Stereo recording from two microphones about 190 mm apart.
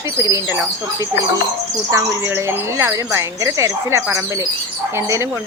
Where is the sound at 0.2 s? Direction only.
15° right (ahead or behind).